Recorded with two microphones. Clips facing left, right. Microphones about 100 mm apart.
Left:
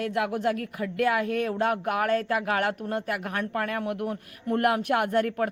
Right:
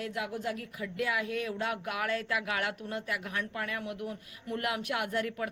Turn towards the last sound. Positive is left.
turn(degrees=50)  # may be behind; listen again after turning